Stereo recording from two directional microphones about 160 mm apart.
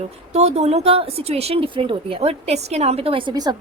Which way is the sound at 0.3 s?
40° right (ahead or behind).